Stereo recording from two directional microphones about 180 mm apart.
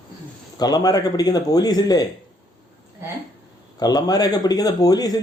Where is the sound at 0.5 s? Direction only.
20° left (ahead or behind).